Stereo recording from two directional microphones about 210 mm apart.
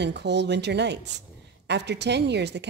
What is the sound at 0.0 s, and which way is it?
A woman's voice, 55° right (ahead or behind).